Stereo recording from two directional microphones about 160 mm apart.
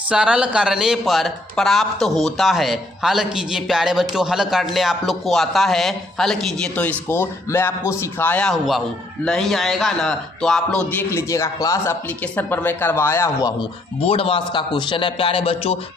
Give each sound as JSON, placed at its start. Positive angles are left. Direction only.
{"t": 0.1, "sound": "a man's voice", "side_deg": -5}
{"t": 11.1, "sound": "speech", "side_deg": 15}
{"t": 13.6, "sound": "a man's voice", "side_deg": 35}